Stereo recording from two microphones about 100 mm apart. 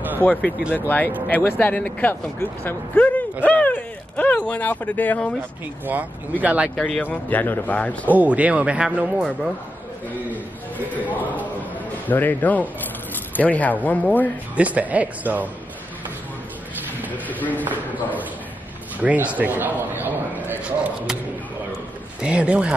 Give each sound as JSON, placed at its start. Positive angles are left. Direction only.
{"t": 0.2, "sound": "speech", "side_deg": 15}
{"t": 3.4, "sound": "a sound", "side_deg": 15}
{"t": 6.4, "sound": "a man's voice", "side_deg": -15}
{"t": 6.7, "sound": "speech", "side_deg": 10}
{"t": 8.1, "sound": "a man's voice", "side_deg": -15}
{"t": 10.9, "sound": "speech", "side_deg": 15}
{"t": 14.5, "sound": "a man's voice", "side_deg": -15}
{"t": 17.1, "sound": "a sound", "side_deg": 15}
{"t": 18.9, "sound": "a man's voice", "side_deg": -15}
{"t": 22.2, "sound": "a man's voice", "side_deg": -10}